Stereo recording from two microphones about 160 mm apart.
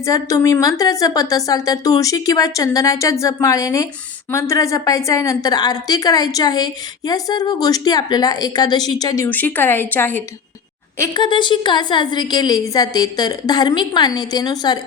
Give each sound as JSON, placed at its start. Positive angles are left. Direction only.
{"t": 0.0, "sound": "a woman's voice", "side_deg": 20}
{"t": 11.1, "sound": "a woman's voice", "side_deg": 30}